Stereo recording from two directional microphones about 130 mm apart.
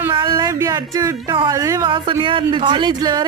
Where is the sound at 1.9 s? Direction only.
40° right (ahead or behind).